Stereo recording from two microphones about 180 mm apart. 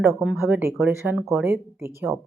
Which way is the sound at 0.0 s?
10° right (ahead or behind).